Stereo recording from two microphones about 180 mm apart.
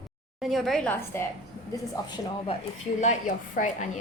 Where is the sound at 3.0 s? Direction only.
45° left (ahead or behind).